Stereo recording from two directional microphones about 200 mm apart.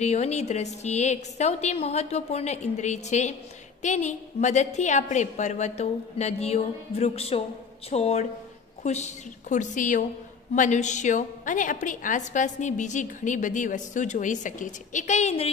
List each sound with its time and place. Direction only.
0.0 s a woman's voice: 35° left (ahead or behind)